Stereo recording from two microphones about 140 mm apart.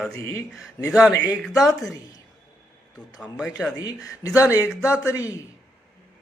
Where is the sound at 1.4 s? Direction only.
Centre (ahead or behind).